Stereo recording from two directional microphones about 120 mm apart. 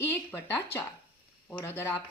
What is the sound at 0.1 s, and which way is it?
A woman's voice, 20° left (ahead or behind).